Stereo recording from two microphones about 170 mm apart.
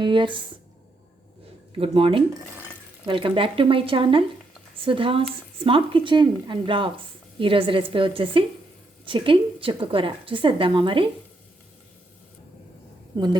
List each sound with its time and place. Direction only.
0.0 s speech: 30° right (ahead or behind)
1.8 s speech: 35° right (ahead or behind)
13.1 s speech: 25° right (ahead or behind)